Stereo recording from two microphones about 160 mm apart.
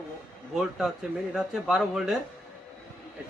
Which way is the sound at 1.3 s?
Centre (ahead or behind).